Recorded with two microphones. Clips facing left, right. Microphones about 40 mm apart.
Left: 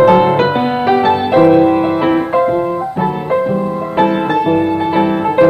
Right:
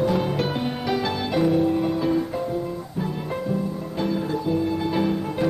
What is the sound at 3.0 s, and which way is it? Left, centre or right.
Music, left.